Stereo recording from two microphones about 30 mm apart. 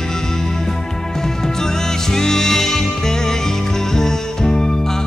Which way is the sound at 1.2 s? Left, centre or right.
Centre.